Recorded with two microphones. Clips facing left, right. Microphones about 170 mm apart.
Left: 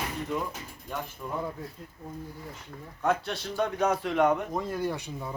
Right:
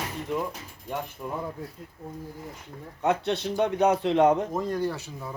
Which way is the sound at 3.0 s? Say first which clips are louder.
Right 3 dB; 20° right (ahead or behind).